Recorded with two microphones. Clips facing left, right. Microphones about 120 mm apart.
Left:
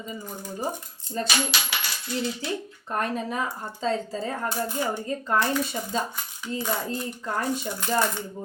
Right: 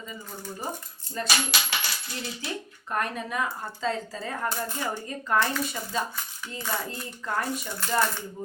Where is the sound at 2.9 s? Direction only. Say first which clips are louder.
Left 2 dB; 30° left (ahead or behind).